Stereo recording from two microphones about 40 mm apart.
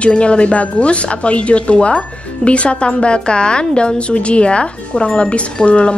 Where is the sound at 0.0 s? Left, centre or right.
Left.